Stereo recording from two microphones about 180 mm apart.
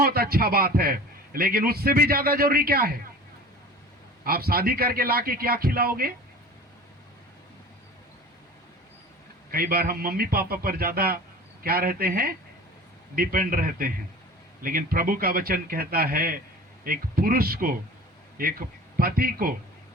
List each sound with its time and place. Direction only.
0.0 s a man's voice: 55° right (ahead or behind)
4.2 s a man's voice: 55° right (ahead or behind)
9.5 s a man's voice: 55° right (ahead or behind)
18.9 s a man's voice: 55° right (ahead or behind)